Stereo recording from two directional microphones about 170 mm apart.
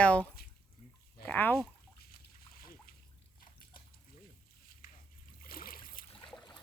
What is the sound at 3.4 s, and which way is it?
Biting, 55° left (ahead or behind).